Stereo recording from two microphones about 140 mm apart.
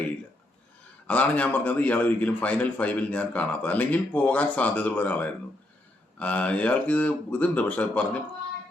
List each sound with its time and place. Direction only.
1.0 s a man's voice: 10° left (ahead or behind)